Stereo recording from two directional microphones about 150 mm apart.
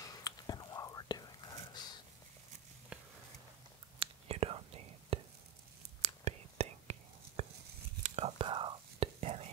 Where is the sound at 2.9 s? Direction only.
5° right (ahead or behind).